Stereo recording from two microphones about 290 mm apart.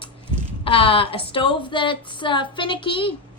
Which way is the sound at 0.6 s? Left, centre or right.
Centre.